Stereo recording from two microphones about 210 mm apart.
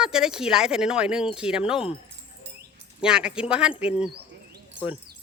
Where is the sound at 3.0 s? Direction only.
5° right (ahead or behind).